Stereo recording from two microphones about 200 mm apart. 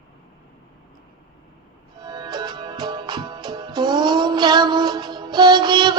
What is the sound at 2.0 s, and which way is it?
Music, 20° right (ahead or behind).